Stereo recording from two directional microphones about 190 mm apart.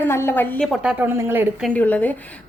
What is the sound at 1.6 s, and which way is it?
Speech, 10° left (ahead or behind).